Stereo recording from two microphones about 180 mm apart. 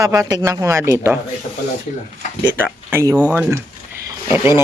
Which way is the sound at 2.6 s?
10° right (ahead or behind).